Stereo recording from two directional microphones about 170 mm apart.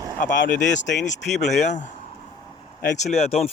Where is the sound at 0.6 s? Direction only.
90° left.